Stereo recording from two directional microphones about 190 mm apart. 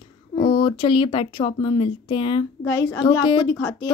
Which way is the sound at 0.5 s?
30° left (ahead or behind).